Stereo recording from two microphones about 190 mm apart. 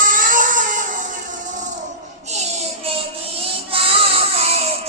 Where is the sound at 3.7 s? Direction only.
30° right (ahead or behind).